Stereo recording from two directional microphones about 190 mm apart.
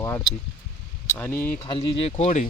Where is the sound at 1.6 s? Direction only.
25° left (ahead or behind).